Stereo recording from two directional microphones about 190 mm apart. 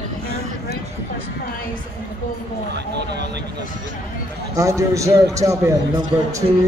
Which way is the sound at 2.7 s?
60° right (ahead or behind).